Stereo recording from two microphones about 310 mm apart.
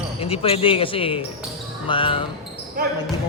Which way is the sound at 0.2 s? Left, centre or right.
Centre.